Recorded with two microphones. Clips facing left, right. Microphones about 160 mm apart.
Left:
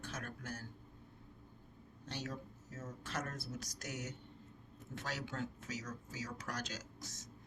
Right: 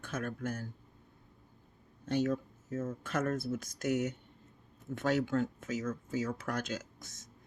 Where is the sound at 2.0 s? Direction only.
55° right (ahead or behind).